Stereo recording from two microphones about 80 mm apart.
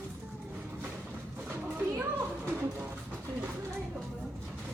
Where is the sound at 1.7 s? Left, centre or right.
Right.